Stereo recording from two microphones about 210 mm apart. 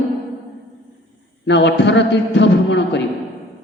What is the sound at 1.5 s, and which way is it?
Mantra, 55° left (ahead or behind).